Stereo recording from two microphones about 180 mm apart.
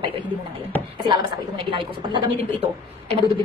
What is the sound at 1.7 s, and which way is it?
Speech, 30° right (ahead or behind).